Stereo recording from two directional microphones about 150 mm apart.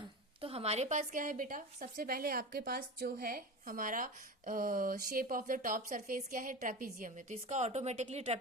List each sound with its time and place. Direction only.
0.4 s a woman's voice: 45° right (ahead or behind); by 7.3 s 60° right (ahead or behind)
7.4 s speech: 50° right (ahead or behind)